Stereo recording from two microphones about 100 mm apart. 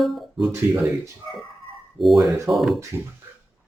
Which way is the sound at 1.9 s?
Centre (ahead or behind).